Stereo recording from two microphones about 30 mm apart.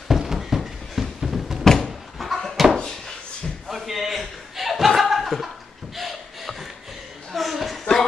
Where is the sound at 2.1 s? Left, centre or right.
Centre.